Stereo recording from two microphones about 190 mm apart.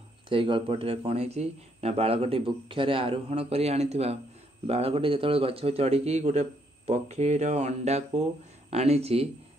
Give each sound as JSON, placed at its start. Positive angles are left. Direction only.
{"t": 0.3, "sound": "a man's voice", "side_deg": -25}